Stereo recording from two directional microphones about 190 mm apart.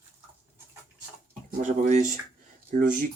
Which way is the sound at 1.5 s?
45° right (ahead or behind).